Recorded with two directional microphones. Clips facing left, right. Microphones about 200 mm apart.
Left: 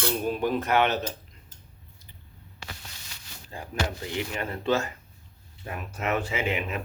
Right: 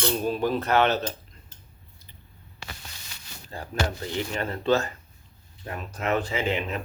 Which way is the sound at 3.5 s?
10° left (ahead or behind).